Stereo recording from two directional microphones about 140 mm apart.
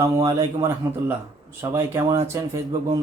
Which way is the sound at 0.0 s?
20° right (ahead or behind).